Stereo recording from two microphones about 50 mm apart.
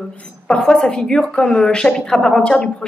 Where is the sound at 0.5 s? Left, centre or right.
Centre.